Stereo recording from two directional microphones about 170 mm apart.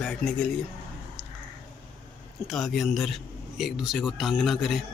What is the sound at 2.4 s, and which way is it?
Speech, centre (ahead or behind).